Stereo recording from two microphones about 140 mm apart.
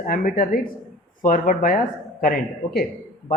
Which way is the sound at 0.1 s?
80° left.